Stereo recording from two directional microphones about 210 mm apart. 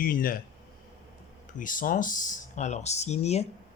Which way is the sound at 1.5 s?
40° left (ahead or behind).